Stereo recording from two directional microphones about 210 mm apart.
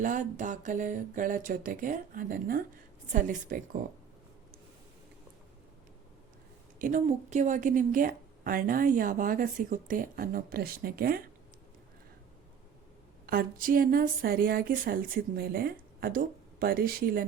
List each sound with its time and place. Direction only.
0.0 s a woman's voice: 35° right (ahead or behind)
6.7 s a woman's voice: 40° right (ahead or behind)
13.2 s speech: 45° right (ahead or behind)